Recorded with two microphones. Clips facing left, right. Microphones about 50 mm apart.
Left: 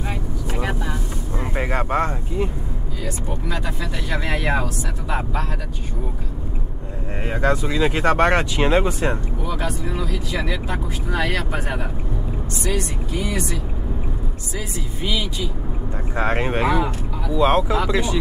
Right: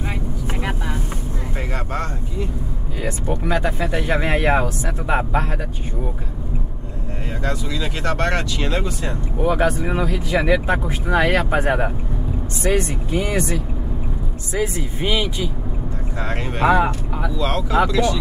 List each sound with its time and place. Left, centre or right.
1.6 s a sound: centre
3.0 s speech: right
7.2 s speech: left
9.4 s speech: right
16.2 s speech: left
16.6 s speech: right
17.3 s speech: left